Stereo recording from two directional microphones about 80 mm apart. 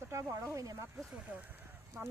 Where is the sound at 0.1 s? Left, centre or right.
Right.